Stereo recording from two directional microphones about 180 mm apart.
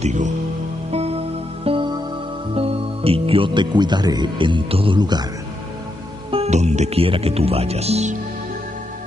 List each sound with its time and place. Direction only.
0.0 s music: 40° right (ahead or behind)
1.6 s music: 30° right (ahead or behind)
2.5 s speech: 30° right (ahead or behind)
6.3 s speech: 35° right (ahead or behind)